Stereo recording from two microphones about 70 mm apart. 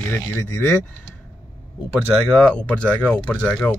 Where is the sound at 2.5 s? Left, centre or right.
Centre.